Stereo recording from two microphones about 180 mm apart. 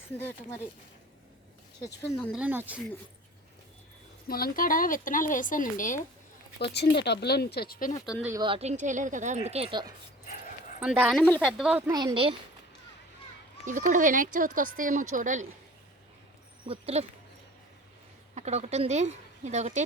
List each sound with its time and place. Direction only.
0.2 s speech: 10° left (ahead or behind)
2.3 s speech: 10° right (ahead or behind)
4.3 s speech: 55° left (ahead or behind)
6.6 s speech: 65° left (ahead or behind)
7.9 s speech: 20° left (ahead or behind)
8.4 s a woman's voice: 30° right (ahead or behind)
10.8 s speech: 5° right (ahead or behind)
11.2 s speech: 5° left (ahead or behind)
11.9 s speech: 20° right (ahead or behind)
13.7 s speech: 45° right (ahead or behind)
16.6 s a woman's voice: 35° right (ahead or behind)
18.3 s a woman's voice: 40° right (ahead or behind)